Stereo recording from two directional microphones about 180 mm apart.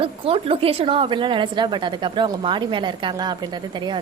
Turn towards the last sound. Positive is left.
turn(degrees=-25)  # may be behind; listen again after turning